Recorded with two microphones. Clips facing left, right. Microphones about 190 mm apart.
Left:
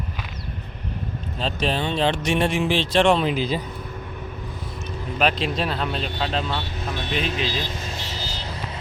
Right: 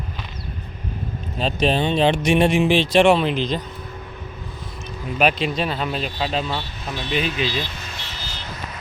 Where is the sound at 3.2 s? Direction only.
5° left (ahead or behind).